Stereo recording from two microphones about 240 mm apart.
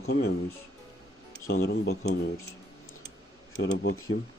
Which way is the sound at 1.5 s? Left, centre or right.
Left.